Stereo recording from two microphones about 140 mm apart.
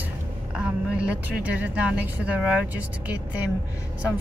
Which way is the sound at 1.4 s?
10° right (ahead or behind).